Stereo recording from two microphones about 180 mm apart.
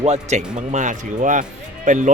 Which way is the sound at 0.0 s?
40° right (ahead or behind).